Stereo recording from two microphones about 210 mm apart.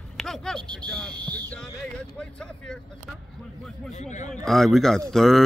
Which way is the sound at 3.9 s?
35° left (ahead or behind).